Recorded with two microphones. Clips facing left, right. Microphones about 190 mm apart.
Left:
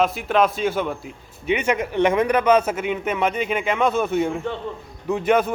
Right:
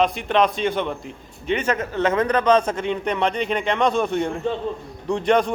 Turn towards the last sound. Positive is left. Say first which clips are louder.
# even
turn(degrees=5)  # may be behind; listen again after turning